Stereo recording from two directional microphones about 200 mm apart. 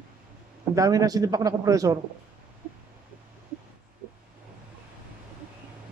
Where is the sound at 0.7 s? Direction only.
15° right (ahead or behind).